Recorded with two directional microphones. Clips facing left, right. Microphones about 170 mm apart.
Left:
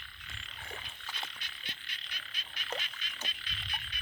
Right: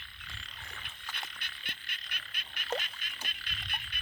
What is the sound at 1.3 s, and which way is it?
Frog, 55° right (ahead or behind).